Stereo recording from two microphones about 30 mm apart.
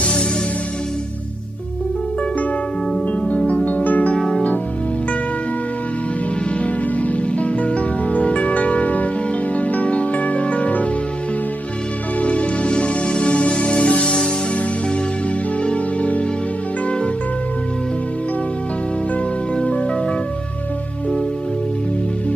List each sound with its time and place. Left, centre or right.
3.2 s music: left
3.8 s music: left
6.9 s music: left
12.2 s music: left
15.6 s music: left
16.8 s music: left